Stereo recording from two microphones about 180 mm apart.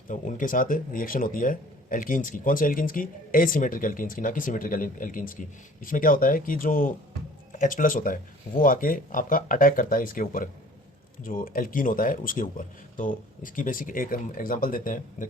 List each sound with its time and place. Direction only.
0.1 s speech: 50° left (ahead or behind)